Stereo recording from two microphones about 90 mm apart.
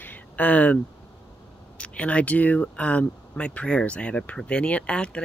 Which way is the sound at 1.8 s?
15° left (ahead or behind).